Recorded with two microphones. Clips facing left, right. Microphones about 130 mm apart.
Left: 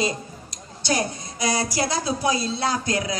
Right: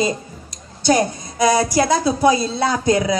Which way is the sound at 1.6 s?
50° right (ahead or behind).